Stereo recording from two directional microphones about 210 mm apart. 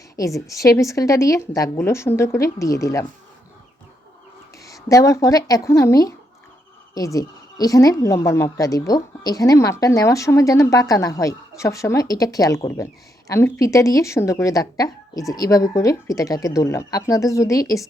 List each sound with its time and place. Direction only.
0.2 s a woman's voice: 15° left (ahead or behind)
4.6 s a woman's voice: 15° left (ahead or behind)